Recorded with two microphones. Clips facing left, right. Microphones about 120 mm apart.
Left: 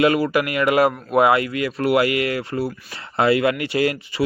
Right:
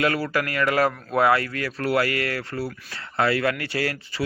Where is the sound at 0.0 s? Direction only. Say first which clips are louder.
Left 6 dB; 15° left (ahead or behind).